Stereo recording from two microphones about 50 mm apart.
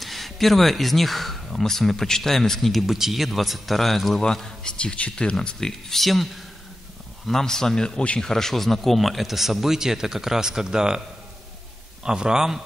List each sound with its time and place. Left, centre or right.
0.0 s speech: centre
2.9 s speech: centre
5.7 s speech: centre
7.2 s a man's voice: centre